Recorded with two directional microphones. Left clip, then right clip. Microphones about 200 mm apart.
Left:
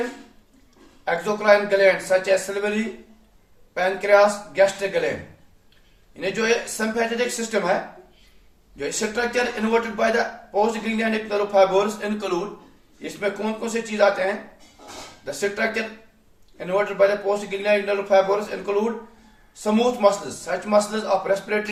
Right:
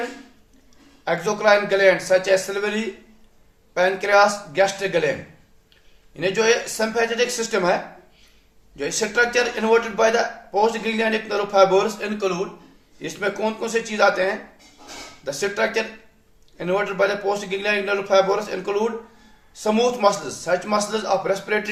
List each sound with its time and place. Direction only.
1.0 s a man's voice: 40° right (ahead or behind)
3.8 s a man's voice: 40° right (ahead or behind)
6.1 s a man's voice: 40° right (ahead or behind)
8.8 s a man's voice: 40° right (ahead or behind)